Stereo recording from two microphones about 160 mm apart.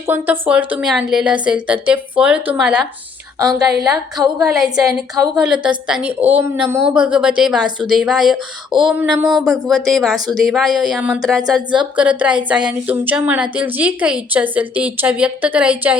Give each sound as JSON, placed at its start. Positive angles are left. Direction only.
{"t": 0.1, "sound": "a woman's voice", "side_deg": -10}
{"t": 4.4, "sound": "a woman's voice", "side_deg": 0}
{"t": 9.0, "sound": "speech", "side_deg": -25}
{"t": 9.4, "sound": "a woman's voice", "side_deg": 0}